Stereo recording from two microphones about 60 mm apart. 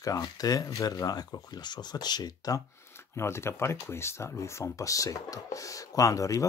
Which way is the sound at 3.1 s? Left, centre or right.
Left.